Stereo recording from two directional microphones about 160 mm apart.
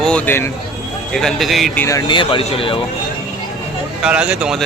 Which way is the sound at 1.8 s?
20° left (ahead or behind).